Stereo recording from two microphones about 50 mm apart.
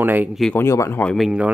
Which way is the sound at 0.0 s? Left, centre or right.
Right.